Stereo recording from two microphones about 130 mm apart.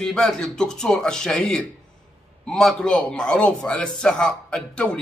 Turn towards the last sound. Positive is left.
turn(degrees=10)  # may be behind; listen again after turning